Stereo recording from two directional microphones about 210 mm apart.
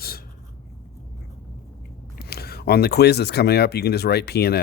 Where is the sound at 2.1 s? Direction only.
45° left (ahead or behind).